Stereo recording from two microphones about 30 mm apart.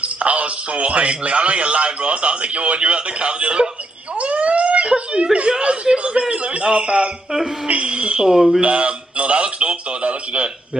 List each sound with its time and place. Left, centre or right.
0.0 s a man's voice: right
4.2 s whimper: right
5.6 s a man's voice: right